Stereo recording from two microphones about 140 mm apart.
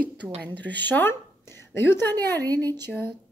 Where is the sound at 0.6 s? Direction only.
10° left (ahead or behind).